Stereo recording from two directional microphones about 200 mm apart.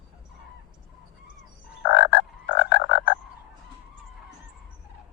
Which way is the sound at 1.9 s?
60° left (ahead or behind).